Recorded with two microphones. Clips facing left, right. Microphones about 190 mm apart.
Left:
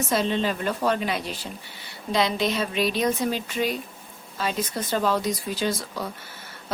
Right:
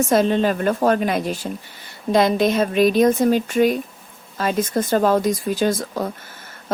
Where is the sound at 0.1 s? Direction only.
50° right (ahead or behind).